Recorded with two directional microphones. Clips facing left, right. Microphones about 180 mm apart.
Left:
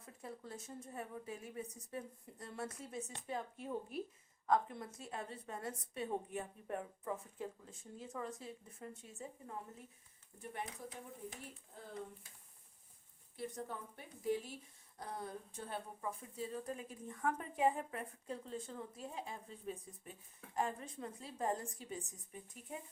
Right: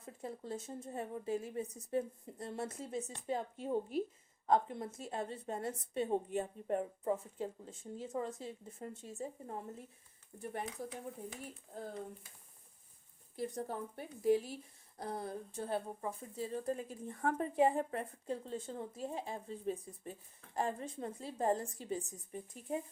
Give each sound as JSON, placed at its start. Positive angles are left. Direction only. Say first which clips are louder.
{"t": 0.0, "sound": "a woman's voice", "louder": "right 5 dB", "side_deg": -25}
{"t": 13.3, "sound": "speech", "louder": "right 5 dB", "side_deg": -40}